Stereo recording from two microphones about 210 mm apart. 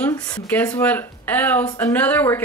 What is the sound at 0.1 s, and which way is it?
Speech, 15° left (ahead or behind).